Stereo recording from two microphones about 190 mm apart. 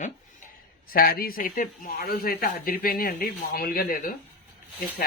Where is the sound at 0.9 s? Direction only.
50° left (ahead or behind).